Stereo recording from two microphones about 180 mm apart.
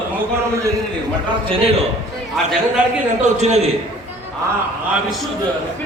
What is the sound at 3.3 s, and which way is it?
Speech, 40° right (ahead or behind).